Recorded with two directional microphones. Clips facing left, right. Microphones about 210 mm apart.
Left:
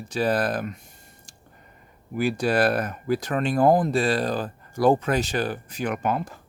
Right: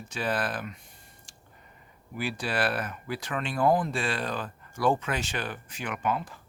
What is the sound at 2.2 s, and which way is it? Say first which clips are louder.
Speech: left 8 dB; 45° left (ahead or behind).